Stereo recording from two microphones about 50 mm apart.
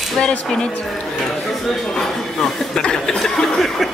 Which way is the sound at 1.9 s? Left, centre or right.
Centre.